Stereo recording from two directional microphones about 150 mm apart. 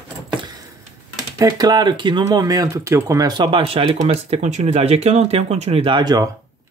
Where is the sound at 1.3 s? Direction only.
25° right (ahead or behind).